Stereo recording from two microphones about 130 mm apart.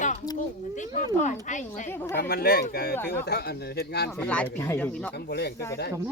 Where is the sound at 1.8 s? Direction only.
15° left (ahead or behind).